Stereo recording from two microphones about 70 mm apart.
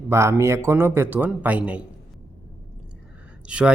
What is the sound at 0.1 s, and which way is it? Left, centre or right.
A man's voice, right.